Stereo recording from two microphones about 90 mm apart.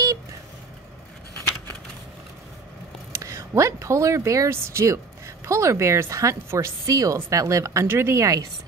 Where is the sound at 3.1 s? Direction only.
30° right (ahead or behind).